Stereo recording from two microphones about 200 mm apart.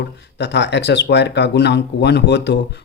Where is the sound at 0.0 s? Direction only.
60° left (ahead or behind).